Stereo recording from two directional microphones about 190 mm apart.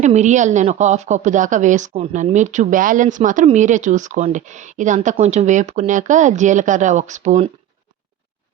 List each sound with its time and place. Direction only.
0.0 s a woman's voice: 40° right (ahead or behind)